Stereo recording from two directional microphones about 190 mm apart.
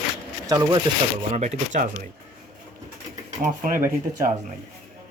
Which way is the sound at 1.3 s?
40° right (ahead or behind).